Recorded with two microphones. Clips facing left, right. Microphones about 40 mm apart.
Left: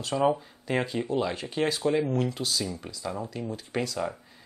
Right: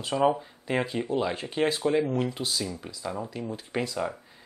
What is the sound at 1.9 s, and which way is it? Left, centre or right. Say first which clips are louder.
Speech: even; centre.